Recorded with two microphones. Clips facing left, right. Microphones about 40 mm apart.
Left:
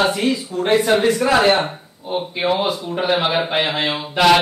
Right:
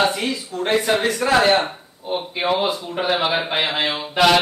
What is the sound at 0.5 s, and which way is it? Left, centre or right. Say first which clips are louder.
Speech: left 2 dB; centre.